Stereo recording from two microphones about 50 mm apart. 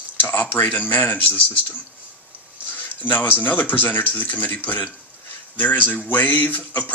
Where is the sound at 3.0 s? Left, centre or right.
Left.